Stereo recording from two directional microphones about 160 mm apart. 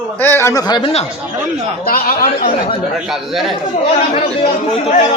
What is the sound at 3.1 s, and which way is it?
Speech, centre (ahead or behind).